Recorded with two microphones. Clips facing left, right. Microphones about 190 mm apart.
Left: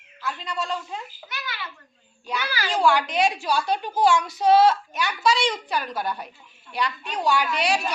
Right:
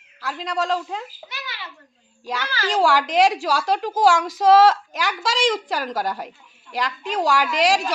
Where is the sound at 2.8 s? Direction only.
90° right.